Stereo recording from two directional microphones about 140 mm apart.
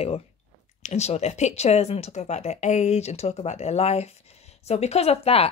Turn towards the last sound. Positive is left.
turn(degrees=45)  # may be behind; listen again after turning